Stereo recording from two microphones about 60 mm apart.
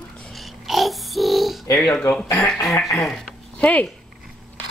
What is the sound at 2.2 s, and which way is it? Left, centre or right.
Speech, left.